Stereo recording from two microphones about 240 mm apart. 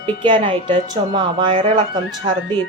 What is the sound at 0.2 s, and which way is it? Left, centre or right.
Speech, right.